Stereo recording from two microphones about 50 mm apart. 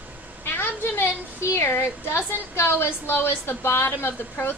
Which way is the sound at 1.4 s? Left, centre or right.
Left.